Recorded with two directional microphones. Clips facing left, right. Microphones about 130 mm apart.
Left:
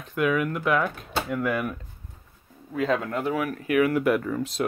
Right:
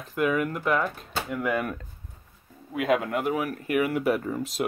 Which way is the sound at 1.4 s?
25° right (ahead or behind).